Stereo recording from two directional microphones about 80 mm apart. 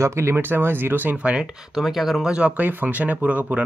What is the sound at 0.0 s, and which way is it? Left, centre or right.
Speech, right.